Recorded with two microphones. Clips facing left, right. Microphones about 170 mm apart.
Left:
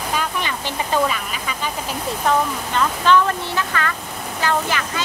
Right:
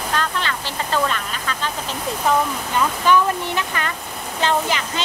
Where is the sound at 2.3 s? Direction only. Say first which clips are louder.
Even; 10° right (ahead or behind).